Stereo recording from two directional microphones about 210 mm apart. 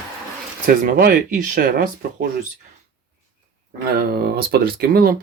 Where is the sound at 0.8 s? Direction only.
40° right (ahead or behind).